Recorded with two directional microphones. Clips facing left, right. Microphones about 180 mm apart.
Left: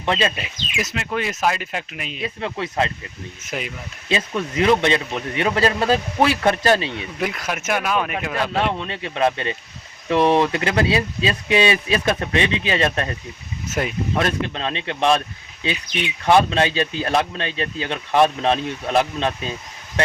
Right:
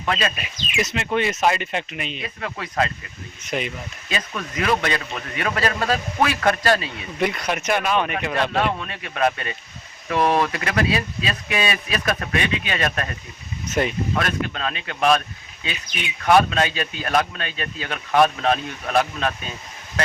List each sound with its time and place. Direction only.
0.0 s speech: 25° left (ahead or behind)
0.8 s speech: centre (ahead or behind)
2.2 s speech: 25° left (ahead or behind)
3.4 s speech: centre (ahead or behind)
4.1 s speech: 25° left (ahead or behind)
6.9 s speech: centre (ahead or behind)
8.8 s speech: 25° left (ahead or behind)
13.7 s speech: centre (ahead or behind)
14.2 s speech: 25° left (ahead or behind)